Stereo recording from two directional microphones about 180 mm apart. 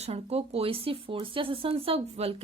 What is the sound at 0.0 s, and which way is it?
Speech, 35° right (ahead or behind).